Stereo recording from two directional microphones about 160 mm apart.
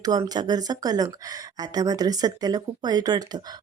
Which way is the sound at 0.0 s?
25° right (ahead or behind).